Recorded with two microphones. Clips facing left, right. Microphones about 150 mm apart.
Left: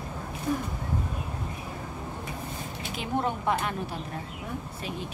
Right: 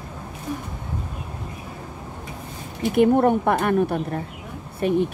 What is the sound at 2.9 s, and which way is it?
Speech, 55° right (ahead or behind).